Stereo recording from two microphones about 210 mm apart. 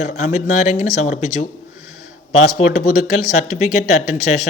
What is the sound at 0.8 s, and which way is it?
Speech, 35° left (ahead or behind).